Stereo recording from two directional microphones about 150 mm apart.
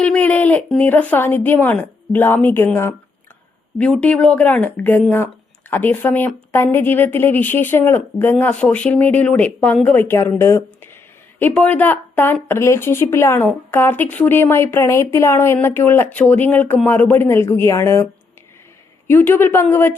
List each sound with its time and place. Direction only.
0.0 s speech: 10° left (ahead or behind)
19.0 s speech: 15° left (ahead or behind)